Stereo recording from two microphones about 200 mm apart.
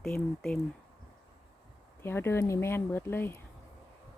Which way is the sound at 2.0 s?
10° left (ahead or behind).